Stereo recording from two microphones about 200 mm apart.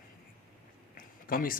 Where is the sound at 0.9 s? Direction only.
45° left (ahead or behind).